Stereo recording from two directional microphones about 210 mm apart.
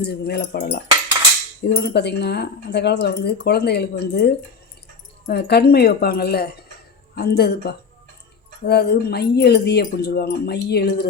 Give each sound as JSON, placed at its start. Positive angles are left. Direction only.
{"t": 0.0, "sound": "speech", "side_deg": 50}